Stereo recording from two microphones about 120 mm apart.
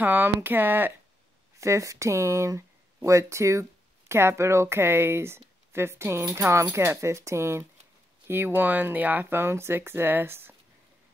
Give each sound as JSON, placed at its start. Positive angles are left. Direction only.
{"t": 0.0, "sound": "speech", "side_deg": -15}